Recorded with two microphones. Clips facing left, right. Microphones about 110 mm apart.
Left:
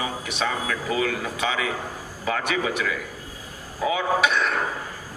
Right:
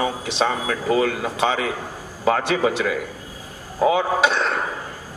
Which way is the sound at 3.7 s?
45° right (ahead or behind).